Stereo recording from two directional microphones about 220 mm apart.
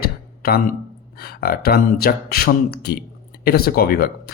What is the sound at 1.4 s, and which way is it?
A man's voice, 45° left (ahead or behind).